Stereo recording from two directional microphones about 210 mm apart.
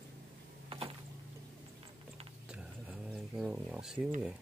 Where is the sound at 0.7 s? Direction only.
25° right (ahead or behind).